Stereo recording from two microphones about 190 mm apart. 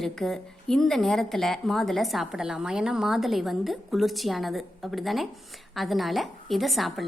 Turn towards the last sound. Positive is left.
turn(degrees=0)  # may be behind; listen again after turning